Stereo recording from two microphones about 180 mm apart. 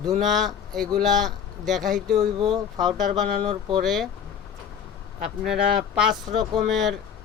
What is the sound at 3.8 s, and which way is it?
Speech, centre (ahead or behind).